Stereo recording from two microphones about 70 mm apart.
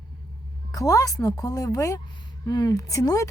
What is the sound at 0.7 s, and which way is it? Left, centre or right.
A woman's voice, left.